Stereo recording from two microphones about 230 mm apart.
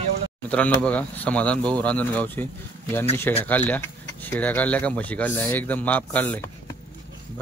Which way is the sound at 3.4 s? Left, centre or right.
Centre.